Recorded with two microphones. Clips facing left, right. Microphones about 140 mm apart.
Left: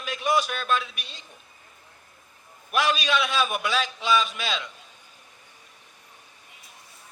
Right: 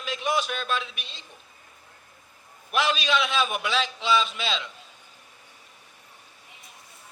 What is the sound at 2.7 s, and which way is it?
A man's voice, 45° left (ahead or behind).